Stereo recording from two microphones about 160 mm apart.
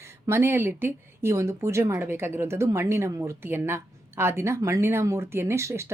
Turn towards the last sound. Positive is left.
turn(degrees=-20)  # may be behind; listen again after turning